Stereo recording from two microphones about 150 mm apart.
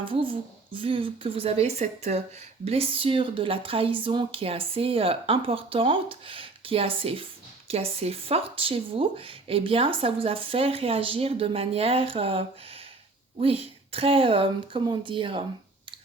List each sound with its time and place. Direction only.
0.0 s speech: 35° right (ahead or behind)